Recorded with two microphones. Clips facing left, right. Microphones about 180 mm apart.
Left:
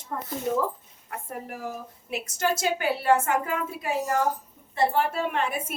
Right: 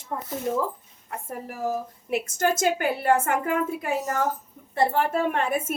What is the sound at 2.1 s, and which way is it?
A woman's voice, 50° right (ahead or behind).